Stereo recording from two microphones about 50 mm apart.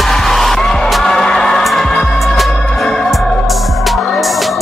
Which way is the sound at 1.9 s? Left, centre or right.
Centre.